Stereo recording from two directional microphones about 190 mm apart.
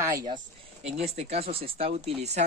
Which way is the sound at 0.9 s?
30° right (ahead or behind).